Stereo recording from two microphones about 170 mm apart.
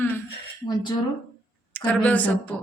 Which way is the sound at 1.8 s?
10° left (ahead or behind).